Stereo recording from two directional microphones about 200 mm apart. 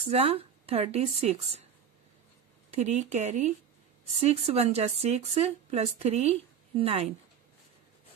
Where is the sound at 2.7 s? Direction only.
35° right (ahead or behind).